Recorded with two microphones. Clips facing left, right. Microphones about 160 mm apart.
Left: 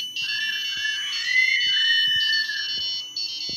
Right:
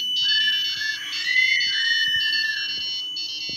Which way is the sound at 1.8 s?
45° right (ahead or behind).